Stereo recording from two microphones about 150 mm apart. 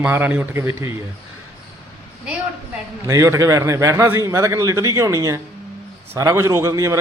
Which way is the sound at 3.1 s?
20° right (ahead or behind).